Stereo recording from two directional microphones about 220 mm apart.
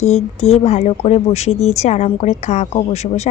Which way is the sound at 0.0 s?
30° left (ahead or behind).